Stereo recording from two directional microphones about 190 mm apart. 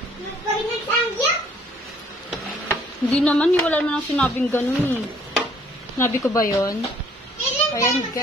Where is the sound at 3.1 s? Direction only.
5° left (ahead or behind).